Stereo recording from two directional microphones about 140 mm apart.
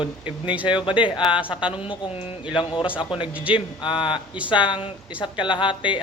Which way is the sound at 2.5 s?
35° left (ahead or behind).